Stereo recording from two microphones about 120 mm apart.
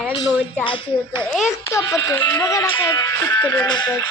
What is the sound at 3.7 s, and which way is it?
Speech, 35° left (ahead or behind).